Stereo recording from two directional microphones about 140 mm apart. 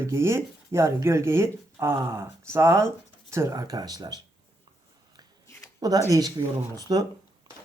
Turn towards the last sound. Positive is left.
turn(degrees=-30)  # may be behind; listen again after turning